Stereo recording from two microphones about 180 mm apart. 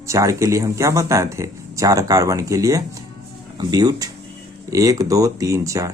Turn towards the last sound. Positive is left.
turn(degrees=-15)  # may be behind; listen again after turning